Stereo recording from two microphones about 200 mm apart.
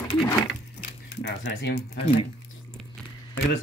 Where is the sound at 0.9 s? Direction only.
60° left (ahead or behind).